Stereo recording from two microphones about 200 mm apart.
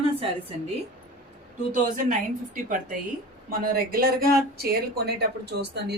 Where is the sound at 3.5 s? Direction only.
45° right (ahead or behind).